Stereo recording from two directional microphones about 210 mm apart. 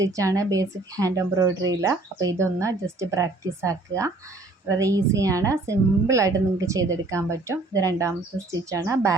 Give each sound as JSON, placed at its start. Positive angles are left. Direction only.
{"t": 0.0, "sound": "a woman's voice", "side_deg": -15}